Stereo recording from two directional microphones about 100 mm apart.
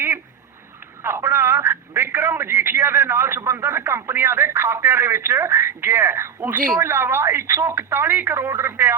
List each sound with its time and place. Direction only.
1.0 s speech: 20° right (ahead or behind)